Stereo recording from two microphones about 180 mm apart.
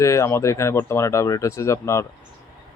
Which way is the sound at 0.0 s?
15° left (ahead or behind).